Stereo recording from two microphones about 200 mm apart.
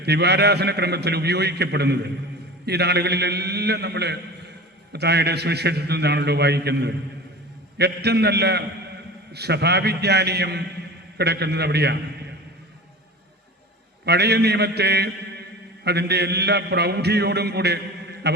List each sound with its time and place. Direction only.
0.0 s a man's voice: 55° right (ahead or behind)
14.0 s a man's voice: 55° right (ahead or behind)